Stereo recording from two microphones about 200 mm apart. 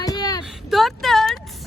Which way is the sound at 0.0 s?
20° left (ahead or behind).